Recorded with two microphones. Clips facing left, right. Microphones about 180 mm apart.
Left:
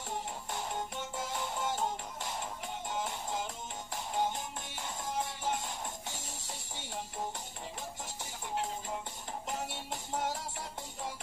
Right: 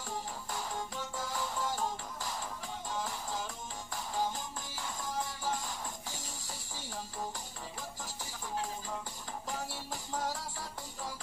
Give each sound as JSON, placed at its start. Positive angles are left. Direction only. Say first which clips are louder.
{"t": 0.5, "sound": "music", "louder": "left 1 dB", "side_deg": 25}
{"t": 9.5, "sound": "music", "louder": "left 1 dB", "side_deg": 20}